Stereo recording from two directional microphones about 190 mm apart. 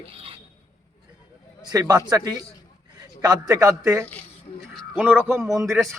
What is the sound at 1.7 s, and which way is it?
Speech, 20° right (ahead or behind).